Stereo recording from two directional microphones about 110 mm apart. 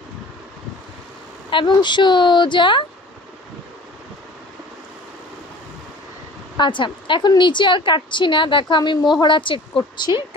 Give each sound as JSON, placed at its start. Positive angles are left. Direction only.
{"t": 1.5, "sound": "a woman's voice", "side_deg": 45}
{"t": 6.5, "sound": "a woman's voice", "side_deg": 45}